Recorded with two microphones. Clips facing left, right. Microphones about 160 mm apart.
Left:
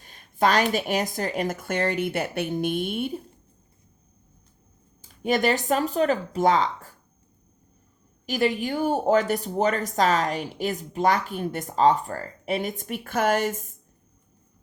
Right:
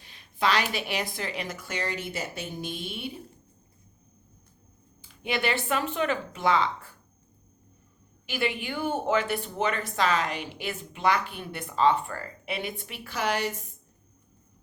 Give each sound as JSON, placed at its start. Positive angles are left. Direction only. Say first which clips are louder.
{"t": 0.0, "sound": "speech", "louder": "left 5 dB", "side_deg": 45}
{"t": 5.0, "sound": "speech", "louder": "left 6 dB", "side_deg": 40}
{"t": 8.3, "sound": "speech", "louder": "left 6 dB", "side_deg": 40}